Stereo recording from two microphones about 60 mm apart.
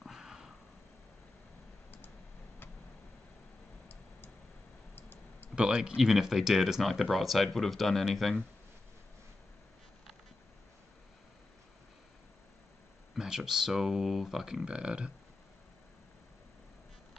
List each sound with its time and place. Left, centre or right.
0.0 s a sound: centre
4.9 s clicking: left
5.6 s speech: centre
13.1 s speech: centre